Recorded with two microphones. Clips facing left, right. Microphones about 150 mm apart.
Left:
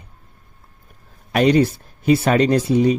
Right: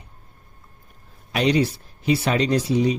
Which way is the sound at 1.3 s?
50° left (ahead or behind).